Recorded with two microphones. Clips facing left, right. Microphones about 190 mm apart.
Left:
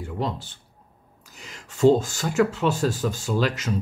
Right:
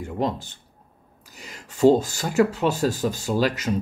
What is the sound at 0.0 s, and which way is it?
Speech, 45° right (ahead or behind).